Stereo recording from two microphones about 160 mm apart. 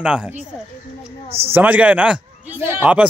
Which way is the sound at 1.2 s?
40° right (ahead or behind).